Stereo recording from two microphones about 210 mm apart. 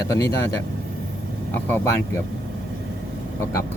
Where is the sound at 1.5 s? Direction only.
10° left (ahead or behind).